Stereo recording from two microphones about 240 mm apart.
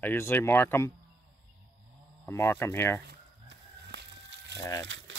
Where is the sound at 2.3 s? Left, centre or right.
Centre.